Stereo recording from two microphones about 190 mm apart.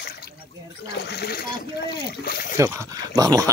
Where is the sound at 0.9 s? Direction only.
55° left (ahead or behind).